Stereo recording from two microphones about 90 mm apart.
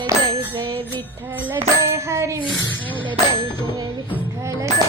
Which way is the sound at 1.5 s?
30° right (ahead or behind).